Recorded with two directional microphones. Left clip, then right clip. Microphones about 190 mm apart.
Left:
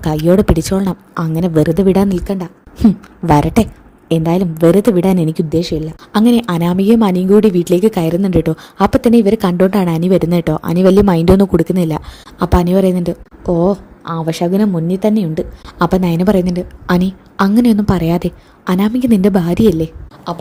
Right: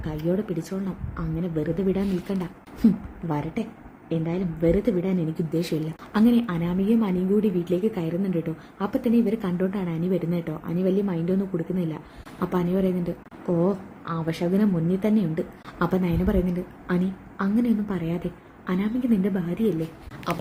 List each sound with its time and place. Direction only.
0.0 s a woman's voice: 45° left (ahead or behind)
3.2 s a woman's voice: 50° left (ahead or behind)
20.3 s speech: 15° left (ahead or behind)